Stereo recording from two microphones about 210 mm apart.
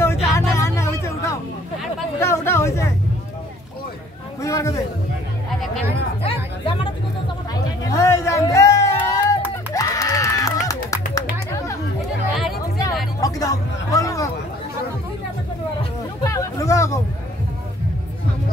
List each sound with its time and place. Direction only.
0.0 s a sound: 10° left (ahead or behind)
4.4 s a sound: 15° left (ahead or behind)
6.2 s chatter: 25° left (ahead or behind)
7.8 s music: 15° left (ahead or behind)
13.2 s hubbub: 15° left (ahead or behind)
16.3 s music: 15° left (ahead or behind)